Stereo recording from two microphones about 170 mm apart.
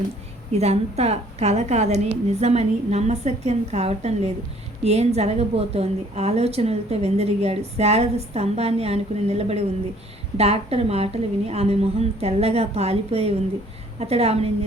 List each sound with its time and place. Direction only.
0.5 s a woman's voice: 40° right (ahead or behind)